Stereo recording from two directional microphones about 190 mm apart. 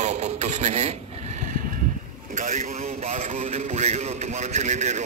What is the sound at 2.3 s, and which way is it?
A man's voice, 40° right (ahead or behind).